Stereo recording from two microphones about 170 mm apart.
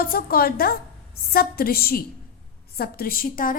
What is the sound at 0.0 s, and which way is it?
A woman's voice, 60° left (ahead or behind).